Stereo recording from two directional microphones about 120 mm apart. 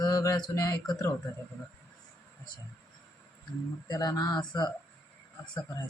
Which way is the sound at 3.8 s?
30° left (ahead or behind).